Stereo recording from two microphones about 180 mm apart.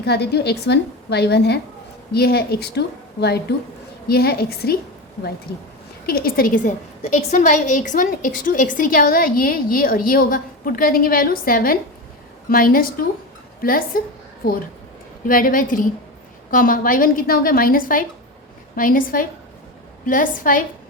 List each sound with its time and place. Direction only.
0.0 s a woman's voice: 65° left (ahead or behind)
6.1 s a woman's voice: 55° left (ahead or behind)
15.3 s a woman's voice: 50° left (ahead or behind)